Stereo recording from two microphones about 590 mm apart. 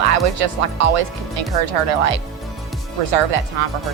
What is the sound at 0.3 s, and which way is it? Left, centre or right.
Speech, right.